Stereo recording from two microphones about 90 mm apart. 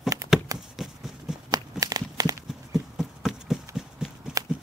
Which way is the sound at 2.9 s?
Centre (ahead or behind).